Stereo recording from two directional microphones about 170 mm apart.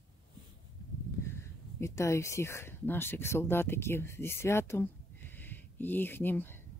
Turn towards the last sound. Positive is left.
turn(degrees=10)  # may be behind; listen again after turning